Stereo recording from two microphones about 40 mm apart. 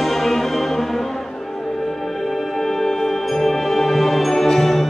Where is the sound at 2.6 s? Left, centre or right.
Centre.